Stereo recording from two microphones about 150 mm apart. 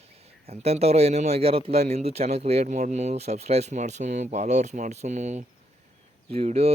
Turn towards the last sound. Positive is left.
turn(degrees=-40)  # may be behind; listen again after turning